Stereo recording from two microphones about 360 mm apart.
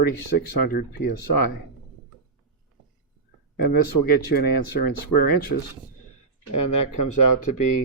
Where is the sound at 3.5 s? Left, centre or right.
Left.